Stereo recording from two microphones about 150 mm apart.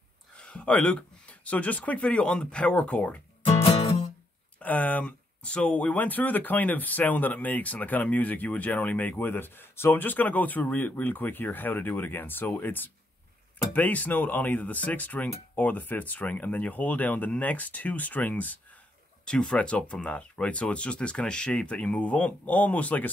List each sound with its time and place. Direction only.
0.4 s speech: 10° left (ahead or behind)
3.8 s music: 45° left (ahead or behind)
4.6 s speech: 10° left (ahead or behind)